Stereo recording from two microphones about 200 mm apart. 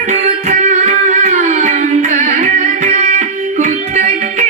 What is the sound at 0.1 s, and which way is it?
Music, 35° right (ahead or behind).